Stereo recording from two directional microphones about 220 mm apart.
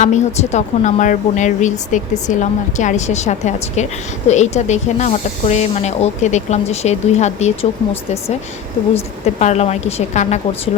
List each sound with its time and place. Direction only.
0.0 s speech: 30° left (ahead or behind)
9.2 s a woman's voice: 30° left (ahead or behind)